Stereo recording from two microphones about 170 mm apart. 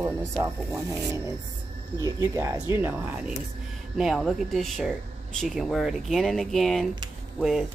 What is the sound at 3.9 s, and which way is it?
Speech, centre (ahead or behind).